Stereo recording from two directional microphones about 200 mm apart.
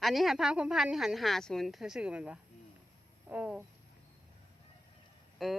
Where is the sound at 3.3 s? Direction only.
5° right (ahead or behind).